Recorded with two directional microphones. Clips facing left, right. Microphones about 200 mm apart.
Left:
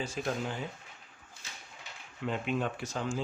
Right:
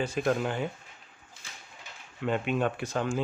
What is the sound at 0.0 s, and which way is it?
Speech, 60° right (ahead or behind).